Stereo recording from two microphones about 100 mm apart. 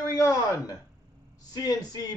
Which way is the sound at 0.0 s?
35° left (ahead or behind).